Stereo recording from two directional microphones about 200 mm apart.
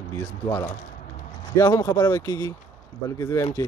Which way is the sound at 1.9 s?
20° left (ahead or behind).